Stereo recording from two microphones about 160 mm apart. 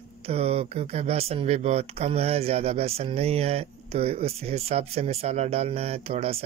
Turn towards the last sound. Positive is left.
turn(degrees=-40)  # may be behind; listen again after turning